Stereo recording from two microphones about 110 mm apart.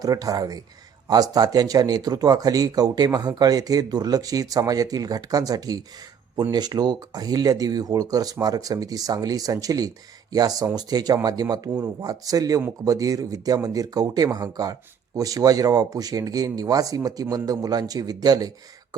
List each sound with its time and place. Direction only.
0.0 s speech: 30° right (ahead or behind)